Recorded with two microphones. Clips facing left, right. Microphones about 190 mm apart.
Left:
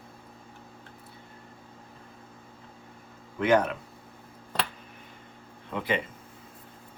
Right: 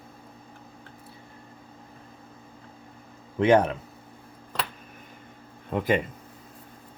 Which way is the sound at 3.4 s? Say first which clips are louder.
Right 4 dB; 25° right (ahead or behind).